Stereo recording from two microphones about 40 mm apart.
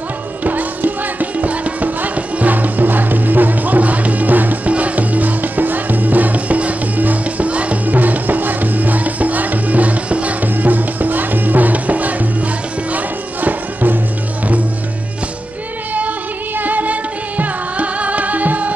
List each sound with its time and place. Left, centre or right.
0.4 s music: right
4.6 s music: right
10.4 s music: right
16.5 s music: right